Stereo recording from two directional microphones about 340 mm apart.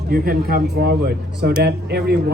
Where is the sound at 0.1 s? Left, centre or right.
Right.